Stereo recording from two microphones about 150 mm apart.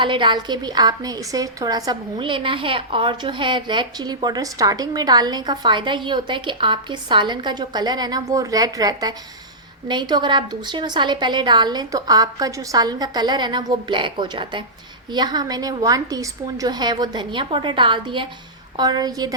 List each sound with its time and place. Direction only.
0.0 s a woman's voice: 35° right (ahead or behind)